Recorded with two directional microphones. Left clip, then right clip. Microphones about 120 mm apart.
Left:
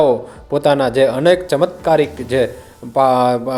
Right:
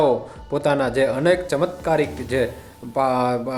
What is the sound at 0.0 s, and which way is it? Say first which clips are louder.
Speech: left 5 dB; 30° left (ahead or behind).